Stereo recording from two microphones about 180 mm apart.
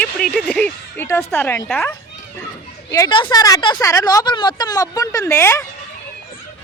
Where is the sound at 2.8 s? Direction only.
20° left (ahead or behind).